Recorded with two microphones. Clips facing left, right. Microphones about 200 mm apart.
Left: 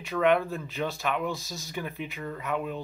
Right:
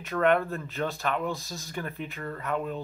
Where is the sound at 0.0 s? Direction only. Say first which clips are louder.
Even; centre (ahead or behind).